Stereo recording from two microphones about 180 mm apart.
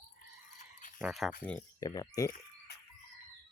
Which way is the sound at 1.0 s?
Centre (ahead or behind).